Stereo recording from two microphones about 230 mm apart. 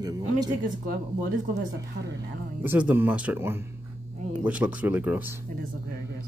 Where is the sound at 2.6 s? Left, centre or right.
Centre.